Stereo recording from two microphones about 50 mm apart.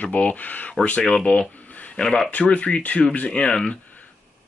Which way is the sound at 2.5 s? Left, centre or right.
Left.